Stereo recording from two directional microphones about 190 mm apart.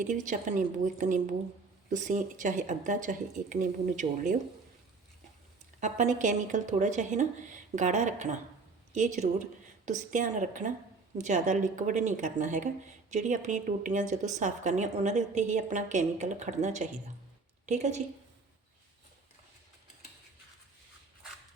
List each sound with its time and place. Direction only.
0.0 s speech: 40° right (ahead or behind)
5.8 s speech: 40° right (ahead or behind)